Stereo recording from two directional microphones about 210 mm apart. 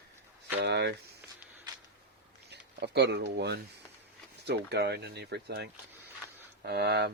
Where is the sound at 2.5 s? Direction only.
55° right (ahead or behind).